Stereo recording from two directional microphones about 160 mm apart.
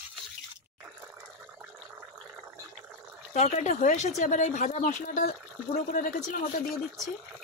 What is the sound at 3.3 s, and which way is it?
Speech, 45° left (ahead or behind).